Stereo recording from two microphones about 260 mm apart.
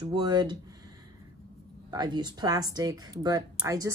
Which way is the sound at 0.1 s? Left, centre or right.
Centre.